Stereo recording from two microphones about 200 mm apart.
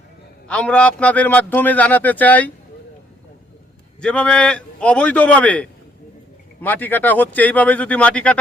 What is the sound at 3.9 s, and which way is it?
A man's voice, 5° left (ahead or behind).